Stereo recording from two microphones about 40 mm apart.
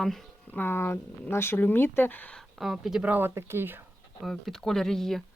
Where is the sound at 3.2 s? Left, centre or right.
Right.